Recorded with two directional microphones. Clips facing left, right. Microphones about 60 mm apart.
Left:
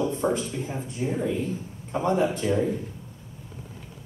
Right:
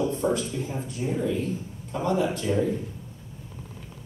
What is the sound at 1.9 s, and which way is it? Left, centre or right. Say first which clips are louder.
Speech: left 1 dB; left.